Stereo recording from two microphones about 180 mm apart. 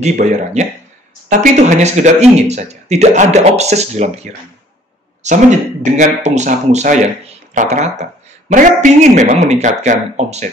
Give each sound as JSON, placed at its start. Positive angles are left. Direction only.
{"t": 0.0, "sound": "a man's voice", "side_deg": -40}